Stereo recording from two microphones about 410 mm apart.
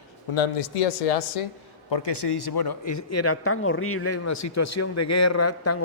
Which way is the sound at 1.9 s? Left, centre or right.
Left.